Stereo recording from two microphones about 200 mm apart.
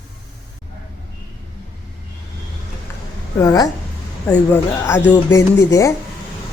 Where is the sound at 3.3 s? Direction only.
20° left (ahead or behind).